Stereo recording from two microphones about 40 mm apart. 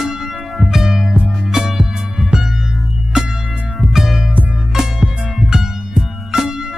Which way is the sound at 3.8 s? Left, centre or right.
Centre.